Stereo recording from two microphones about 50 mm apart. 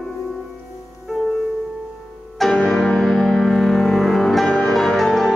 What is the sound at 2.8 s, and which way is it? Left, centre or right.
Music, centre.